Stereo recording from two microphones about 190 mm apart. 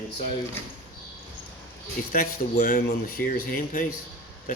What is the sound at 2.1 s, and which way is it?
Speech, 50° left (ahead or behind).